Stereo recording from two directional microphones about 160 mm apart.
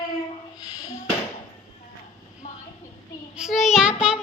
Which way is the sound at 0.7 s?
20° left (ahead or behind).